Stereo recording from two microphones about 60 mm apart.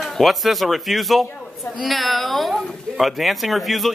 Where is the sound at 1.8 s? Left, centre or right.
Centre.